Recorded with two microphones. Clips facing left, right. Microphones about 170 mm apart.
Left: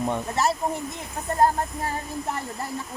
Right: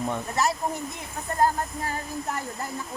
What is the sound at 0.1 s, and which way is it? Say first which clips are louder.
Speech: left 1 dB; 25° left (ahead or behind).